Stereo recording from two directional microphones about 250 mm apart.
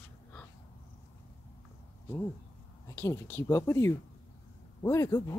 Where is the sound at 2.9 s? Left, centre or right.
Centre.